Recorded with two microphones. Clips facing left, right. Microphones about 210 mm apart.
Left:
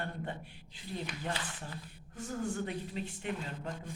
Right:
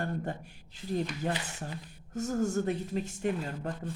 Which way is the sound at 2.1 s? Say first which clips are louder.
Right 7 dB; 45° right (ahead or behind).